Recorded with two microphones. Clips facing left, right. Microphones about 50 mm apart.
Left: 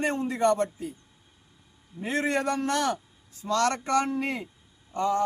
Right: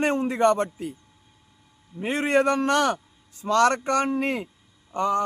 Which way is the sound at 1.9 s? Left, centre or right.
Right.